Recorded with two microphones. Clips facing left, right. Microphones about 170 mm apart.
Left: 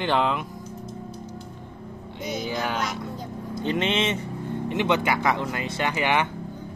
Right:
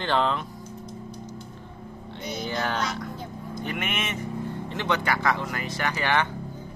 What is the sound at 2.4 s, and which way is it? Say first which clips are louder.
Speech: even; 10° left (ahead or behind).